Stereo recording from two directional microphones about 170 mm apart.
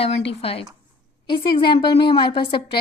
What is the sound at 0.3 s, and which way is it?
A woman's voice, 35° left (ahead or behind).